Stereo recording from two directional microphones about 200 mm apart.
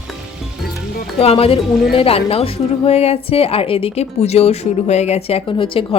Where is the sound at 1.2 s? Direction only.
30° left (ahead or behind).